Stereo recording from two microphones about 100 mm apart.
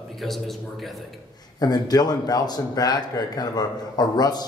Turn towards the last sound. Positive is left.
turn(degrees=45)  # may be behind; listen again after turning